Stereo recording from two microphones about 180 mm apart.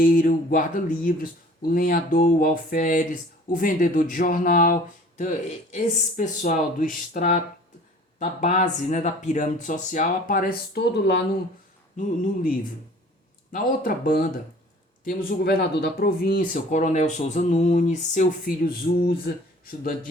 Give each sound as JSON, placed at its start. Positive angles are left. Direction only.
{"t": 0.0, "sound": "speech", "side_deg": 50}
{"t": 5.7, "sound": "speech", "side_deg": 40}
{"t": 11.9, "sound": "speech", "side_deg": 50}